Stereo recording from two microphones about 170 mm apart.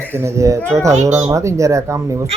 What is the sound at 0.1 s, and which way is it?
A man's voice, 15° right (ahead or behind).